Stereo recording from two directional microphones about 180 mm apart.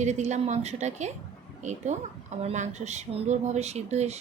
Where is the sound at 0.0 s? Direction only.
40° right (ahead or behind).